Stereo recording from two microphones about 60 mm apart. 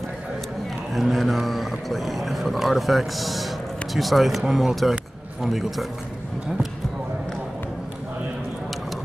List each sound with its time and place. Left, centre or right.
0.9 s a man's voice: centre